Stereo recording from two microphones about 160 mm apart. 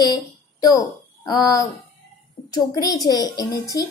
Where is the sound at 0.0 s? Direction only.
25° left (ahead or behind).